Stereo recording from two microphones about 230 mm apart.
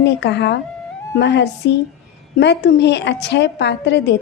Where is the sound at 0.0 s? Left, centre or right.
Left.